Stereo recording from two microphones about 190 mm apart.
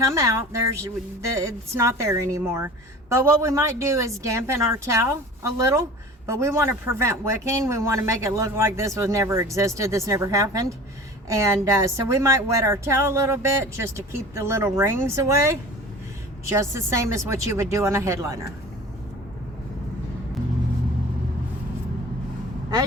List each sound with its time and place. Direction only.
0.1 s a woman's voice: 15° right (ahead or behind)